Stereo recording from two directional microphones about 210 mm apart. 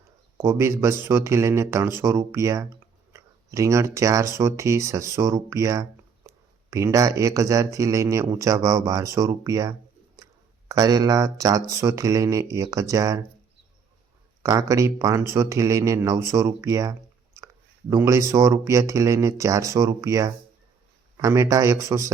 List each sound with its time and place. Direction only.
0.3 s speech: 15° right (ahead or behind)
14.4 s speech: 15° right (ahead or behind)